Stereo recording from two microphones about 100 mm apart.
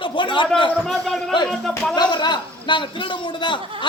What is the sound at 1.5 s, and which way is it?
Speech, 5° left (ahead or behind).